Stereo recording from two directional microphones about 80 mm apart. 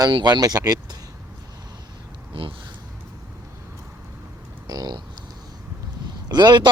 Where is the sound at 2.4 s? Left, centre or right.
Right.